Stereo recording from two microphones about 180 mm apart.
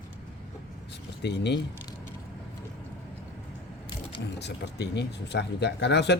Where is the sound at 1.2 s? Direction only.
70° left (ahead or behind).